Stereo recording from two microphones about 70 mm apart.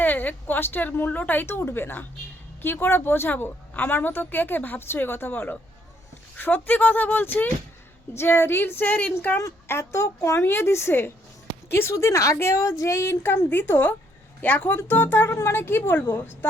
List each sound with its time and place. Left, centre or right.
0.0 s a woman's voice: left
9.6 s a woman's voice: left